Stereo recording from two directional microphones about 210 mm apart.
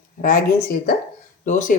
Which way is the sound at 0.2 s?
40° left (ahead or behind).